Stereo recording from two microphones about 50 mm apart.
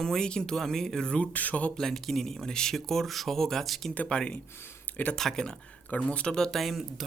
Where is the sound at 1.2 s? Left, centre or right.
Left.